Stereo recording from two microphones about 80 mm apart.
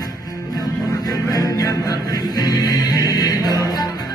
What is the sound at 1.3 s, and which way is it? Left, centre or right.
Music, left.